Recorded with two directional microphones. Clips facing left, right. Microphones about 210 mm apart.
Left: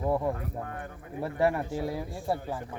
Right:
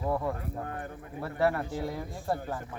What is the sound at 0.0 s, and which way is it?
Speech, 15° left (ahead or behind).